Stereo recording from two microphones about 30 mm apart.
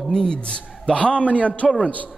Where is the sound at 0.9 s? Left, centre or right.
Left.